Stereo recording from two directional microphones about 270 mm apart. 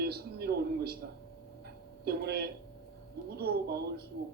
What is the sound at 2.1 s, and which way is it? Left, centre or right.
A man's voice, right.